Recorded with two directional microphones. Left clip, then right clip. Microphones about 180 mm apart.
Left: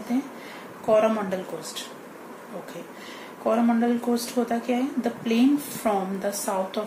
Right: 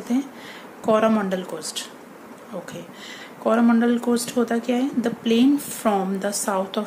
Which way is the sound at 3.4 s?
55° right (ahead or behind).